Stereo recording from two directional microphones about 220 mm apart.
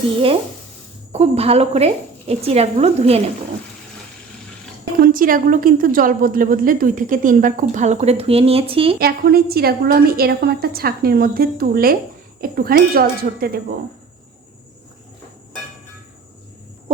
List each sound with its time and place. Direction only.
1.1 s a woman's voice: 30° right (ahead or behind)
4.9 s a woman's voice: 40° right (ahead or behind); by 9.0 s 25° right (ahead or behind)
9.0 s a woman's voice: 45° right (ahead or behind)